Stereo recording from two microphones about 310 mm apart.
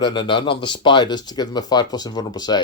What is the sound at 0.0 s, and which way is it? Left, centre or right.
Speech, centre.